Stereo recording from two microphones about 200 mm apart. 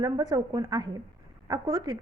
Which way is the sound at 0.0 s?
20° right (ahead or behind).